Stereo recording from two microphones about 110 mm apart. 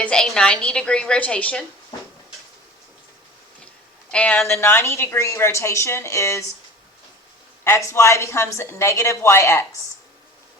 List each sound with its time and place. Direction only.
0.0 s a woman's voice: 5° left (ahead or behind)
4.1 s a woman's voice: 10° left (ahead or behind)
4.5 s a woman's voice: 20° left (ahead or behind)
7.6 s a woman's voice: 25° left (ahead or behind)